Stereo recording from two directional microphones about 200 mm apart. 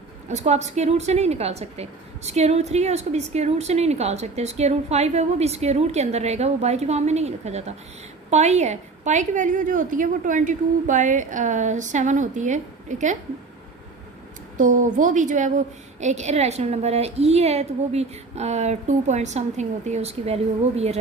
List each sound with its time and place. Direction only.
0.3 s a woman's voice: 35° right (ahead or behind)
14.6 s a woman's voice: 40° right (ahead or behind)